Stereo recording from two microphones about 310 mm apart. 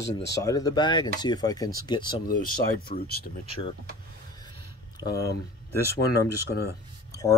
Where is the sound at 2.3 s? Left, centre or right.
Left.